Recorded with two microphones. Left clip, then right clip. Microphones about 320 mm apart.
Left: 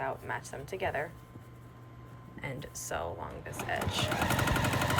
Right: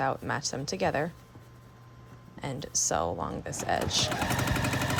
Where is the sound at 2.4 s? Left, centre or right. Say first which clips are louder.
Right 9 dB; centre.